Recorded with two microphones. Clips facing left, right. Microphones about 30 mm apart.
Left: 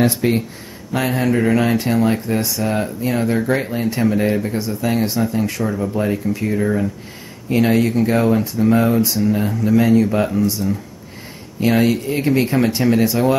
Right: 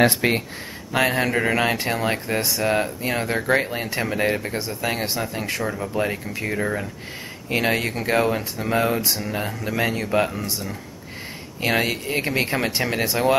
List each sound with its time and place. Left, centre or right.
0.0 s speech: right
0.9 s speech: right
5.6 s speech: centre
5.9 s speech: centre
9.8 s speech: right
11.6 s speech: centre